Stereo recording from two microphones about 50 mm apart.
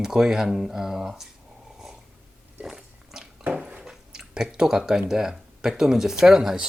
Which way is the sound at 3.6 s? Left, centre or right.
Right.